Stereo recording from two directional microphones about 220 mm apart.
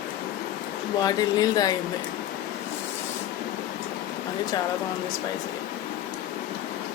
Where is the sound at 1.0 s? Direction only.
15° left (ahead or behind).